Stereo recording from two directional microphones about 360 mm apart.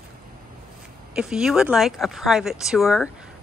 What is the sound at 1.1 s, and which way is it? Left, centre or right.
Speech, centre.